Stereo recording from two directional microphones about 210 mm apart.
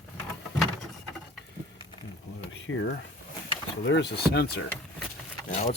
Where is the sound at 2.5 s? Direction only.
60° left (ahead or behind).